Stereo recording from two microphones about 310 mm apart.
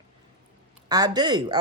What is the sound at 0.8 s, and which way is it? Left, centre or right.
Speech, centre.